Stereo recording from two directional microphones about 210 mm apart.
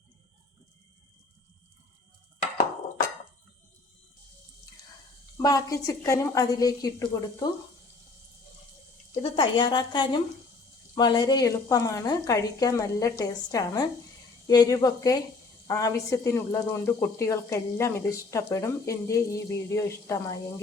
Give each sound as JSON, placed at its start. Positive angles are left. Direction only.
{"t": 5.4, "sound": "speech", "side_deg": 15}
{"t": 9.2, "sound": "speech", "side_deg": 25}